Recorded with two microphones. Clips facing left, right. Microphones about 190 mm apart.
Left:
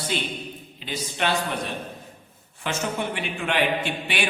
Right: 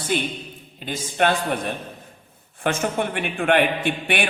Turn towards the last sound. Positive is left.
turn(degrees=-55)  # may be behind; listen again after turning